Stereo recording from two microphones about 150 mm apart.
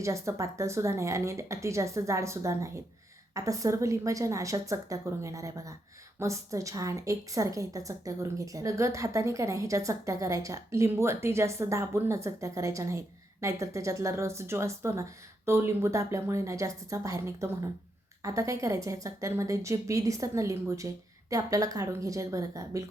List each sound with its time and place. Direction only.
0.0 s a woman's voice: 20° right (ahead or behind)